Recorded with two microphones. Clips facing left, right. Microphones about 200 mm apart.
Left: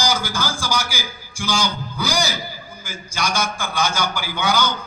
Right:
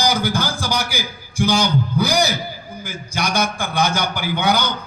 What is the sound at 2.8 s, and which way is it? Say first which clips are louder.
A man's voice: right 2 dB; 60° right (ahead or behind).